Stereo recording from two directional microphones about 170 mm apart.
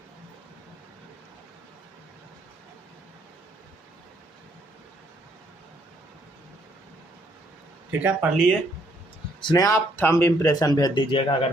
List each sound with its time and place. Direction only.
7.9 s speech: 10° right (ahead or behind)
9.4 s speech: 25° left (ahead or behind)